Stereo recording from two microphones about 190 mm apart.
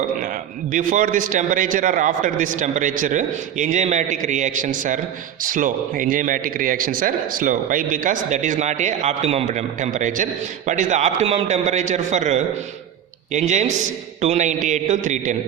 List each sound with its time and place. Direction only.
0.7 s a man's voice: 45° right (ahead or behind)